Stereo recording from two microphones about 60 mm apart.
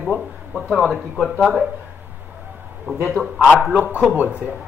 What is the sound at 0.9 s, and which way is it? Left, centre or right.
Speech, centre.